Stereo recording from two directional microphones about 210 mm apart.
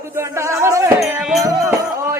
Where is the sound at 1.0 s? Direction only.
Centre (ahead or behind).